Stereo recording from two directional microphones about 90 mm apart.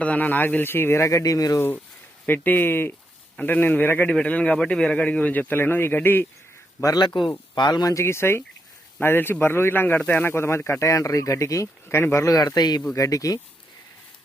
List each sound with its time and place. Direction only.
0.0 s speech: 15° left (ahead or behind); by 1.5 s 40° left (ahead or behind)
2.2 s speech: 20° left (ahead or behind)
6.8 s speech: 50° left (ahead or behind)
7.9 s speech: 30° left (ahead or behind)
12.4 s speech: 45° left (ahead or behind)
12.9 s speech: 40° left (ahead or behind)